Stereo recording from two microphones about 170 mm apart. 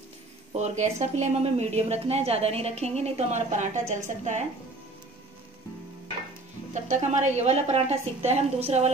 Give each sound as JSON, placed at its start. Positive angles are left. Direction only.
{"t": 0.6, "sound": "a woman's voice", "side_deg": -40}
{"t": 6.7, "sound": "a woman's voice", "side_deg": -45}